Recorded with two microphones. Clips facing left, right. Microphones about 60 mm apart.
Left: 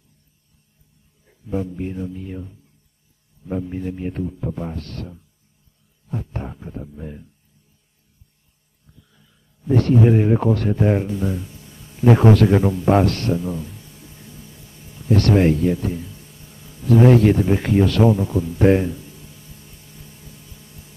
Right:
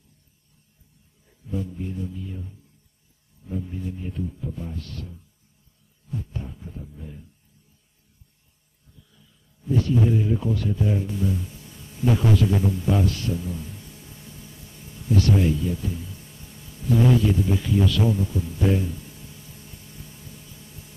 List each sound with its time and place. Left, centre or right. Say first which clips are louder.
1.5 s speech: left 5 dB; left
3.6 s a man's voice: left 7 dB; left
9.7 s a man's voice: left 6 dB; left
11.1 s speech: left 2 dB; left
15.0 s a man's voice: left 6 dB; left